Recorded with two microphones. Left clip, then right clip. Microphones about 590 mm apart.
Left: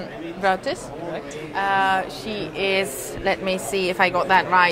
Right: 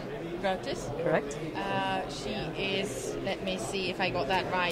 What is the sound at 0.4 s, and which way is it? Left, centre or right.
A woman's voice, left.